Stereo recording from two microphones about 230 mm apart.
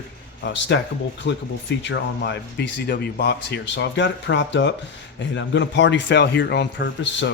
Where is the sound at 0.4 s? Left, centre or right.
Left.